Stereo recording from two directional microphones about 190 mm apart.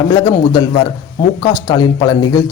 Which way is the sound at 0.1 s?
20° left (ahead or behind).